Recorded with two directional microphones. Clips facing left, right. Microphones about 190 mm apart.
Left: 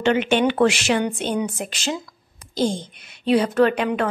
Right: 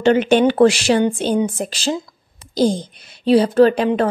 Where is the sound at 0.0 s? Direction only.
35° right (ahead or behind).